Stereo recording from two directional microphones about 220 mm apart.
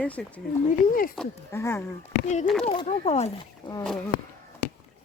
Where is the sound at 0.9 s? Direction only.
40° left (ahead or behind).